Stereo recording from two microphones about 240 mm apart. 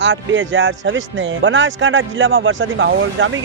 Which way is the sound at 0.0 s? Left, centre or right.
Right.